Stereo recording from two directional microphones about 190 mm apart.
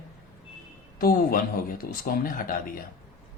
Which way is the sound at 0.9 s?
50° left (ahead or behind).